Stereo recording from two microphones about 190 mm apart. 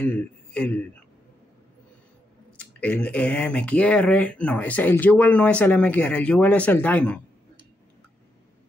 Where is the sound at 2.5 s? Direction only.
5° left (ahead or behind).